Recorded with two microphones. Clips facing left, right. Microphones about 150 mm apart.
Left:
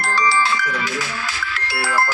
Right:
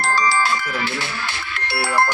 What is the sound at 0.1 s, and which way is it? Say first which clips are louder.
Music: left 1 dB; 45° right (ahead or behind).